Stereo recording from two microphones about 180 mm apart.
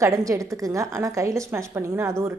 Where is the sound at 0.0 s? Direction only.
15° right (ahead or behind).